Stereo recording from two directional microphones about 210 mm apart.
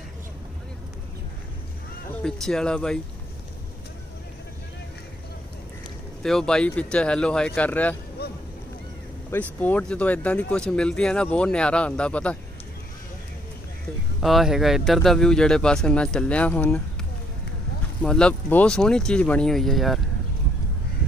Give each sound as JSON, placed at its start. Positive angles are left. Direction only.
{"t": 2.4, "sound": "speech", "side_deg": 5}
{"t": 6.2, "sound": "speech", "side_deg": 5}
{"t": 8.2, "sound": "a sound", "side_deg": 50}
{"t": 9.3, "sound": "speech", "side_deg": 10}
{"t": 14.2, "sound": "speech", "side_deg": 0}
{"t": 18.0, "sound": "speech", "side_deg": 5}